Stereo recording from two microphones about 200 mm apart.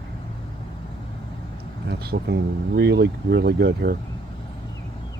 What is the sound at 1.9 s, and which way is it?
Speech, 55° right (ahead or behind).